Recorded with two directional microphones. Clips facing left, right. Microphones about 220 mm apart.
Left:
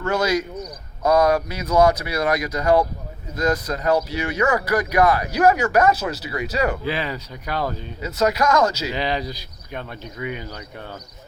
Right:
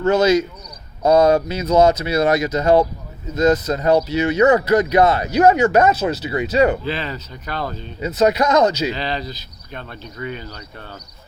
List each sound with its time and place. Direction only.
0.0 s speech: 25° right (ahead or behind)
6.8 s speech: 10° left (ahead or behind)
8.0 s speech: 20° right (ahead or behind)
8.9 s speech: 15° left (ahead or behind)